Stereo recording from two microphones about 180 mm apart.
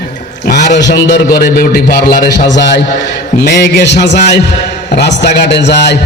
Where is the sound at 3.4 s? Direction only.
70° left (ahead or behind).